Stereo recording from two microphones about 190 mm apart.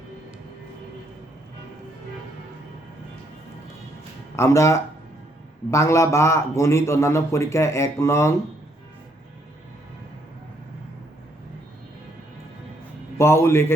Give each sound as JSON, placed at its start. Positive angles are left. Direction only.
{"t": 4.4, "sound": "a man's voice", "side_deg": 15}
{"t": 13.1, "sound": "a man's voice", "side_deg": 15}